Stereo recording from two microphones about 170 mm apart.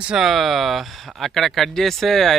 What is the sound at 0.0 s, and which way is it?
Speech, 5° right (ahead or behind).